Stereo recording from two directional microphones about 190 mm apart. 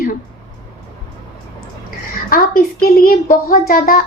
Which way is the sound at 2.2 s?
50° left (ahead or behind).